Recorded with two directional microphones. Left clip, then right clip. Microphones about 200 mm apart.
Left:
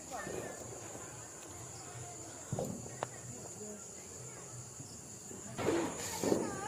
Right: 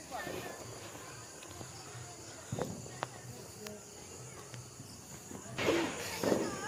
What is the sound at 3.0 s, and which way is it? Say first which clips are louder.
Music: even; 55° left (ahead or behind).